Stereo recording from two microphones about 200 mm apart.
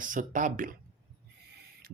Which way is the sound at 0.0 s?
40° right (ahead or behind).